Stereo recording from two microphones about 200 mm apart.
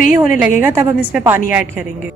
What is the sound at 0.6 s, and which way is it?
A woman's voice, 10° right (ahead or behind).